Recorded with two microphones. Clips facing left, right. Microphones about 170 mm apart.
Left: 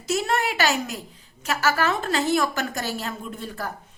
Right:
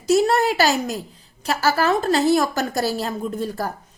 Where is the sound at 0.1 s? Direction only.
40° right (ahead or behind).